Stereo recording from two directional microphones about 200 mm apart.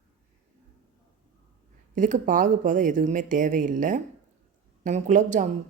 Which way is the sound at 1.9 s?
40° right (ahead or behind).